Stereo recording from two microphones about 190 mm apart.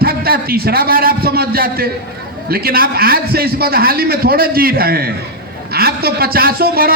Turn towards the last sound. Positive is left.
turn(degrees=-55)  # may be behind; listen again after turning